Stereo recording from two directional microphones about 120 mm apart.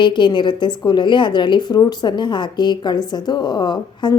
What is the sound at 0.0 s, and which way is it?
A woman's voice, 40° left (ahead or behind).